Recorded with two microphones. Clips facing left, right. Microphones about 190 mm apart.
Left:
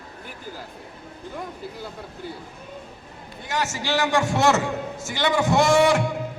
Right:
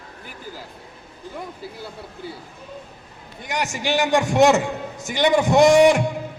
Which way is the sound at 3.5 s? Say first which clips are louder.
Right 2 dB; 15° right (ahead or behind).